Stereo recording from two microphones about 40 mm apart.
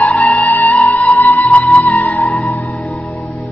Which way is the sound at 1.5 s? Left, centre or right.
Left.